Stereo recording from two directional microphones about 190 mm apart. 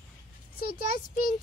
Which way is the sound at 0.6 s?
50° left (ahead or behind).